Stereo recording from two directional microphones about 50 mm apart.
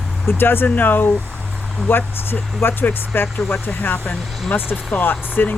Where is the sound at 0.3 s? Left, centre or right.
Left.